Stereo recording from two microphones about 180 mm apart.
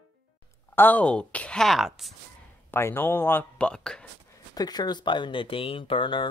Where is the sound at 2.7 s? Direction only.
15° left (ahead or behind).